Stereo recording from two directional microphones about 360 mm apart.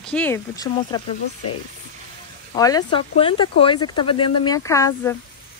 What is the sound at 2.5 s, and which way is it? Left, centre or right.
Speech, centre.